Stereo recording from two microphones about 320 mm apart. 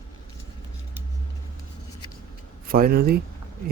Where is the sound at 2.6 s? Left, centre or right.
Right.